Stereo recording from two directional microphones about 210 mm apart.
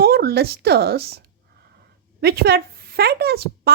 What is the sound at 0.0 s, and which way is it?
Speech, 50° right (ahead or behind).